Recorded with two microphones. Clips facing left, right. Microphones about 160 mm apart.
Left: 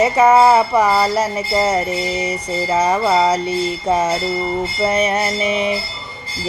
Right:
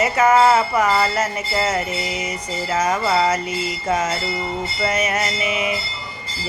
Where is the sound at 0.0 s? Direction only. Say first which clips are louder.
Left 4 dB; 30° left (ahead or behind).